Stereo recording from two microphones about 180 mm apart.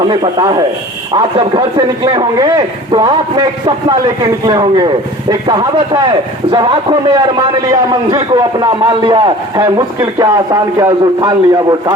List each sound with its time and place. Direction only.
0.0 s a man's voice: 25° right (ahead or behind)